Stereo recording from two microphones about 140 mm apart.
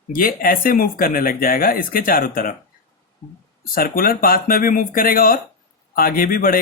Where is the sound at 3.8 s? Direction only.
90° left.